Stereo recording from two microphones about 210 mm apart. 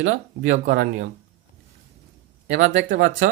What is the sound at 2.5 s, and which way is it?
Speech, 55° right (ahead or behind).